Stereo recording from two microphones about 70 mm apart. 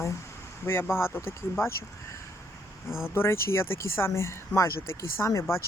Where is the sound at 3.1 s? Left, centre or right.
Left.